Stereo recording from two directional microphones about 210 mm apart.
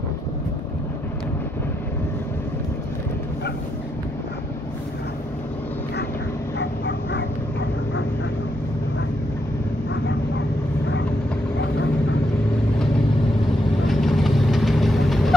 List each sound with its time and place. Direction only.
6.6 s dog: 55° left (ahead or behind)
13.8 s vehicle: centre (ahead or behind)